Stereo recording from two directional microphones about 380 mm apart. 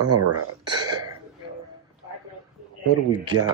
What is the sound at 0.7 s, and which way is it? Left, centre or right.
Speech, centre.